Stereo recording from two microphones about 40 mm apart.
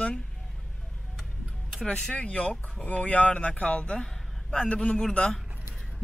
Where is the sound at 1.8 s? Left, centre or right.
Left.